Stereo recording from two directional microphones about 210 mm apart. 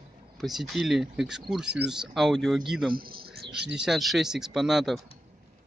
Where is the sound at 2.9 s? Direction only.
45° right (ahead or behind).